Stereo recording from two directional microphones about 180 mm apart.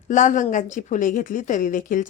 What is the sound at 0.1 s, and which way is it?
Speech, 45° left (ahead or behind).